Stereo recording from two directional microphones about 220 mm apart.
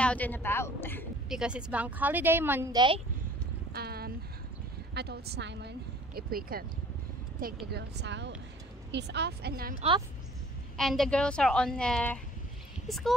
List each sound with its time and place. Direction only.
0.0 s a woman's voice: 5° left (ahead or behind)
1.3 s speech: 5° right (ahead or behind); by 3.0 s 20° right (ahead or behind)
3.7 s a sound: 45° right (ahead or behind)
4.9 s a woman's voice: 45° right (ahead or behind)
7.7 s a woman's voice: 50° right (ahead or behind)
10.8 s a woman's voice: centre (ahead or behind)